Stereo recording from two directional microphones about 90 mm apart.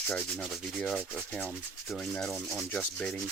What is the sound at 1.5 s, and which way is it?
Speech, centre (ahead or behind).